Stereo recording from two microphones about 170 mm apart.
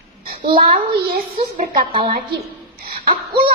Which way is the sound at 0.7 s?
60° right (ahead or behind).